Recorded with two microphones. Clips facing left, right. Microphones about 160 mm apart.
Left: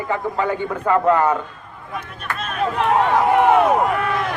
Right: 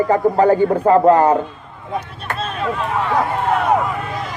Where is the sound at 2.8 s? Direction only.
70° left (ahead or behind).